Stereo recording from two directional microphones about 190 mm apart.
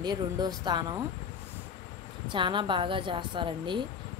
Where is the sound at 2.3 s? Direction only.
25° right (ahead or behind).